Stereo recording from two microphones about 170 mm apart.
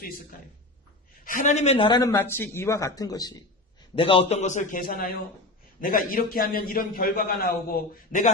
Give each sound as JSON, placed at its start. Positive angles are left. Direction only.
{"t": 0.0, "sound": "a man's voice", "side_deg": 60}
{"t": 2.0, "sound": "speech", "side_deg": 15}
{"t": 3.9, "sound": "a man's voice", "side_deg": 30}